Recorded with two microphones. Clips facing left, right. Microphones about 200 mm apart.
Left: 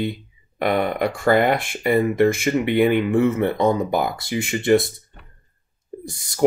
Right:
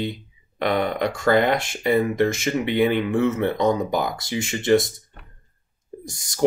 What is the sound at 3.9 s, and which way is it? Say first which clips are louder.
Speech: left 2 dB; 55° left (ahead or behind).